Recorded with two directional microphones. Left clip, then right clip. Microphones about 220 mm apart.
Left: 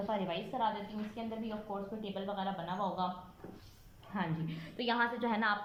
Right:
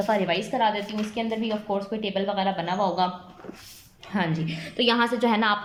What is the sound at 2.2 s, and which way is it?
Speech, 35° right (ahead or behind).